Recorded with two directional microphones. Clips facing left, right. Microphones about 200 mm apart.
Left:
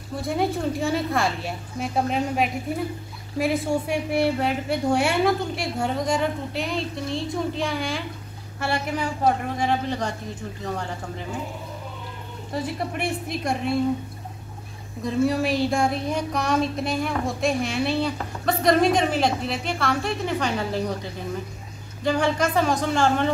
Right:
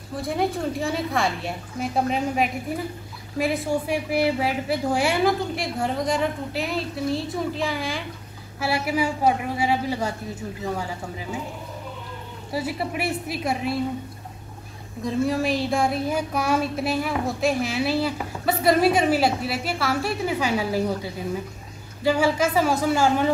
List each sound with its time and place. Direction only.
0.1 s a man's voice: centre (ahead or behind)
12.5 s speech: 5° right (ahead or behind)
15.0 s a man's voice: centre (ahead or behind)